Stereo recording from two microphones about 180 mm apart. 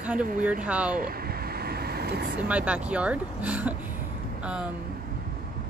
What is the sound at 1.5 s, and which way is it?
Vehicle, 60° right (ahead or behind).